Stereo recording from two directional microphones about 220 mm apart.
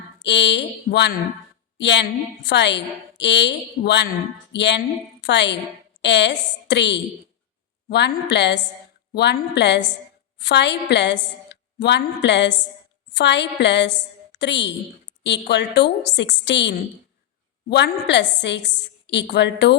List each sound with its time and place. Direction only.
0.2 s a woman's voice: 50° left (ahead or behind)